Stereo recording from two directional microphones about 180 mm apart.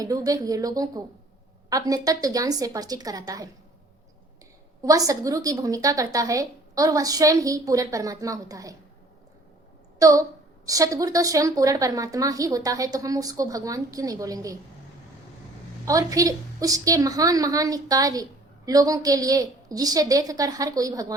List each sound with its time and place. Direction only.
0.0 s a woman's voice: 20° right (ahead or behind)
4.8 s a woman's voice: 20° right (ahead or behind)
10.0 s a woman's voice: 20° right (ahead or behind)
15.9 s a woman's voice: 20° right (ahead or behind)